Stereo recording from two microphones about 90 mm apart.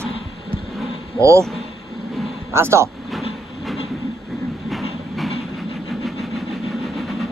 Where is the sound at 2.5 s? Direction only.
30° right (ahead or behind).